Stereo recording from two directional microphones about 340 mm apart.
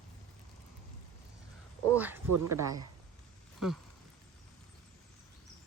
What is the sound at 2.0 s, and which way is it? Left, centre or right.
Speech, centre.